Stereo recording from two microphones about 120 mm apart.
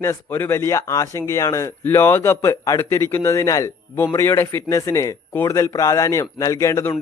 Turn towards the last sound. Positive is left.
turn(degrees=25)  # may be behind; listen again after turning